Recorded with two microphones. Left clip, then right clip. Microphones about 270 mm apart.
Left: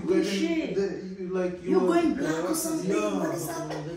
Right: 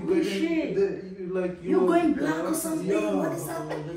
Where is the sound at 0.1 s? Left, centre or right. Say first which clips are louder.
Even; centre.